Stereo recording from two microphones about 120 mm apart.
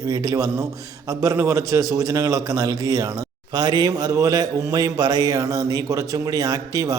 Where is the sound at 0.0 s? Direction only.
30° right (ahead or behind).